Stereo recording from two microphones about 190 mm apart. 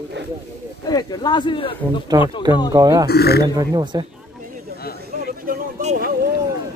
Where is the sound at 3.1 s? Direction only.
55° left (ahead or behind).